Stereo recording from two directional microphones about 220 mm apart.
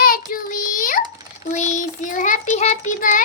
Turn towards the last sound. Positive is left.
turn(degrees=35)  # may be behind; listen again after turning